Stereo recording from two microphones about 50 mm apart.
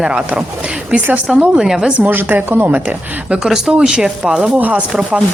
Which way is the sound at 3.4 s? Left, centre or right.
Centre.